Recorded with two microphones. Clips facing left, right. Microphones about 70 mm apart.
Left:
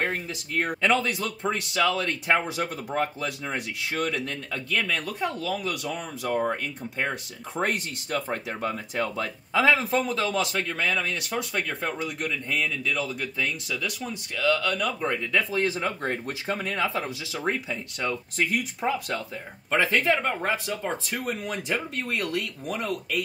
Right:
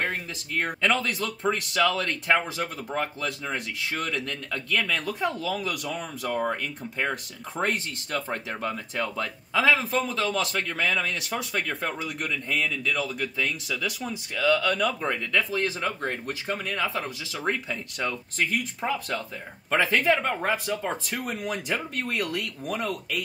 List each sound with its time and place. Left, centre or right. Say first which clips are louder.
0.1 s speech: left 1 dB; centre
15.6 s speech: left 2 dB; centre
16.0 s speech: left 1 dB; centre